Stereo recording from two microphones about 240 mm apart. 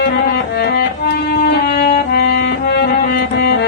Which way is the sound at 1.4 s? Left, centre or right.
Left.